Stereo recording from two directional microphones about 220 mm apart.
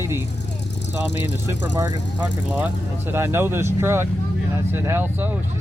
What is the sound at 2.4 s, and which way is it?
Speech, 5° right (ahead or behind).